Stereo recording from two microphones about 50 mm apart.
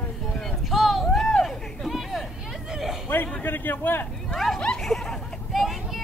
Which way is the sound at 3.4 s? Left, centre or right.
Left.